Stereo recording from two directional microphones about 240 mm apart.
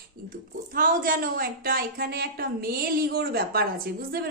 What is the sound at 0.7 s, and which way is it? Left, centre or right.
A woman's voice, right.